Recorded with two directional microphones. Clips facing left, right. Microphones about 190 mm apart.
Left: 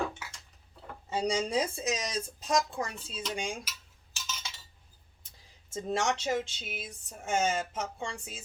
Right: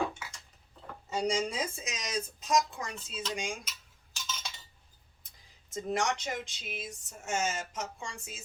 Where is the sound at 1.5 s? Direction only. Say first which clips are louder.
Left 7 dB; 35° left (ahead or behind).